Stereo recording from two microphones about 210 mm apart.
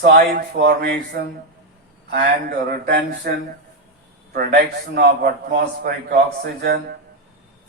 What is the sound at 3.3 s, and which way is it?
A man's voice, 45° right (ahead or behind).